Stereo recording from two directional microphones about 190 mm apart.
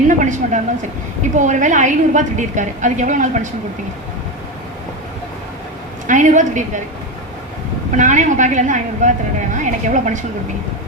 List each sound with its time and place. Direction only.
0.1 s a woman's voice: 40° right (ahead or behind)
6.1 s a woman's voice: 40° right (ahead or behind)
7.9 s a woman's voice: 40° right (ahead or behind)